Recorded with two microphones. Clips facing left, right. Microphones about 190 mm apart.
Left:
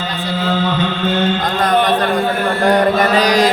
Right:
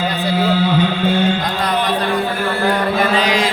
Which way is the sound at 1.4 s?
50° left (ahead or behind).